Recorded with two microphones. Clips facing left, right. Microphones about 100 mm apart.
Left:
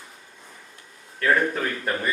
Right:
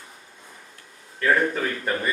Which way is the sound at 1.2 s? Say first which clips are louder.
Even; centre (ahead or behind).